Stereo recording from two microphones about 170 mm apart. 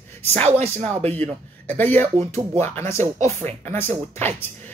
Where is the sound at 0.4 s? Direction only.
40° right (ahead or behind).